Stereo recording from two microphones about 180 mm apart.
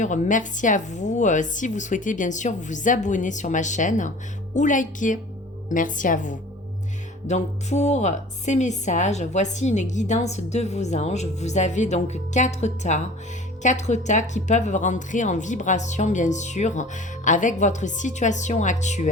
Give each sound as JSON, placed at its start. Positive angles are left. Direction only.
{"t": 0.0, "sound": "a woman's voice", "side_deg": 45}